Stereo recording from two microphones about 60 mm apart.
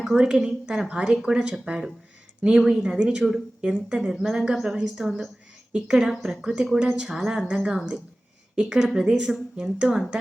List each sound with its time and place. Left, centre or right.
0.2 s speech: centre